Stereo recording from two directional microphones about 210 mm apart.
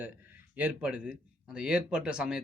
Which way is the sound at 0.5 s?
5° right (ahead or behind).